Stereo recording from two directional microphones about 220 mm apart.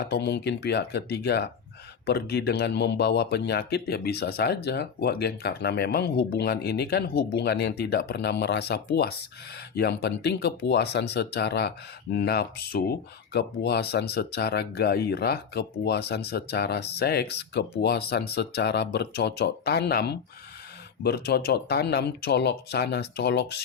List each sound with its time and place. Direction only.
0.1 s speech: 50° left (ahead or behind)